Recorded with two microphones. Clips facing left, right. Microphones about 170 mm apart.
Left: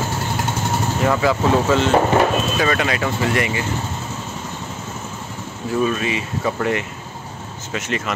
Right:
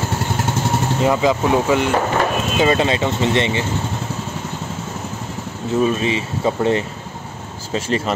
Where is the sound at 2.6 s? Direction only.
25° right (ahead or behind).